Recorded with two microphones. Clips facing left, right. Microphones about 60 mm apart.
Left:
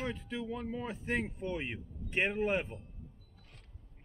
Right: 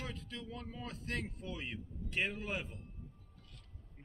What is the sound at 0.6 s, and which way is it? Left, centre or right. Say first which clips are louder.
Speech: left 7 dB; left.